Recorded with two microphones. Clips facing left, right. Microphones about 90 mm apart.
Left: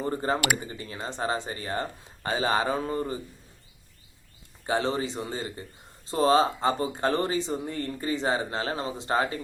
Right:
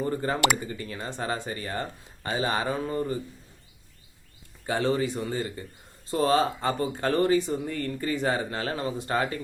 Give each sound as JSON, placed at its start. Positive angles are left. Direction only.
{"t": 0.0, "sound": "speech", "side_deg": 25}
{"t": 4.6, "sound": "speech", "side_deg": 25}